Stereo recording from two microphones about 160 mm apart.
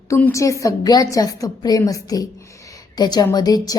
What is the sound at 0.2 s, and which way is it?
A woman's voice, 20° left (ahead or behind).